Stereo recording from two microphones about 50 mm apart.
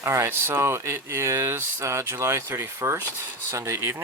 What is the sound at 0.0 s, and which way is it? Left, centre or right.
Speech, right.